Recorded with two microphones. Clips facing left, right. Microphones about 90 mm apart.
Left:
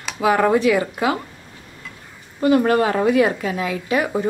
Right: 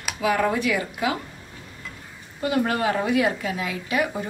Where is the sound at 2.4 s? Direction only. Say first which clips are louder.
Left 7 dB; 45° left (ahead or behind).